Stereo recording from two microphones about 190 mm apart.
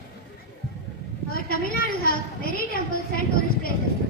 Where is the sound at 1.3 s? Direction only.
50° left (ahead or behind).